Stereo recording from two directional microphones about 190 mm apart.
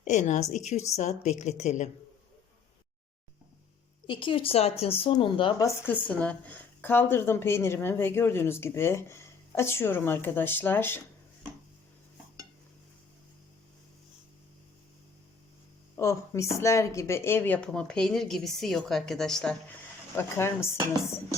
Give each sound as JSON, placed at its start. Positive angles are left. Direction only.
{"t": 0.0, "sound": "a woman's voice", "side_deg": 40}
{"t": 4.0, "sound": "speech", "side_deg": 25}
{"t": 5.6, "sound": "a woman's voice", "side_deg": 10}
{"t": 16.0, "sound": "a woman's voice", "side_deg": 15}
{"t": 20.1, "sound": "a woman's voice", "side_deg": 15}